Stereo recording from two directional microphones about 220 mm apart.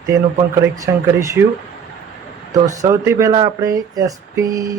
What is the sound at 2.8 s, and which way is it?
Speech, 15° right (ahead or behind).